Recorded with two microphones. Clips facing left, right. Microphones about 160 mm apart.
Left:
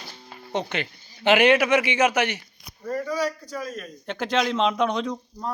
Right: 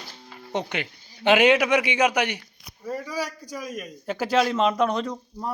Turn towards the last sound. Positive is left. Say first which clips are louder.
# left 1 dB
turn(degrees=0)  # may be behind; listen again after turning